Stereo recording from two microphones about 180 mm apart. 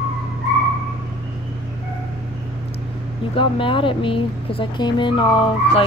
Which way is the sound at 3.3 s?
30° left (ahead or behind).